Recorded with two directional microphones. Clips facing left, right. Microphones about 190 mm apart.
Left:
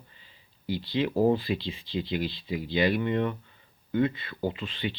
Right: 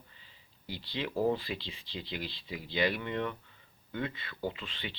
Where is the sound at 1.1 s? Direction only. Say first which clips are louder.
Left 6 dB; 30° left (ahead or behind).